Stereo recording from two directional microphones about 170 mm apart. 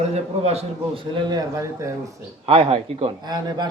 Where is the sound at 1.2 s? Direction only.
20° right (ahead or behind).